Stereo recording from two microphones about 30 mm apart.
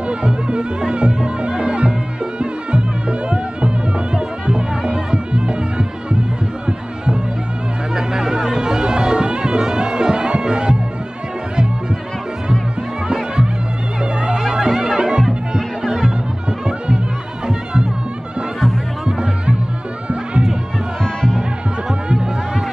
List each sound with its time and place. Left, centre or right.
0.1 s music: right
7.9 s music: centre
14.6 s music: centre
15.0 s music: right
15.8 s music: centre
21.0 s music: centre